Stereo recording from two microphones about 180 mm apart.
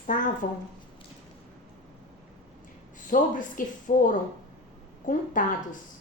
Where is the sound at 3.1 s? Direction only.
50° left (ahead or behind).